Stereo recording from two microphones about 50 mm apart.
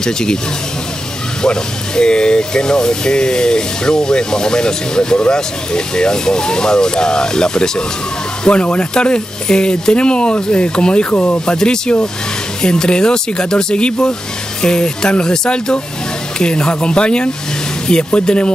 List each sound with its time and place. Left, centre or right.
0.0 s speech: centre
1.4 s speech: centre